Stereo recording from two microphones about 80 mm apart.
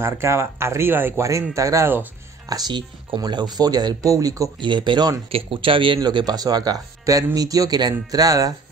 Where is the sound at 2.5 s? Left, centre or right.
Right.